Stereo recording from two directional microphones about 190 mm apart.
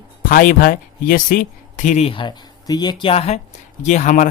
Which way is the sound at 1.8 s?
35° left (ahead or behind).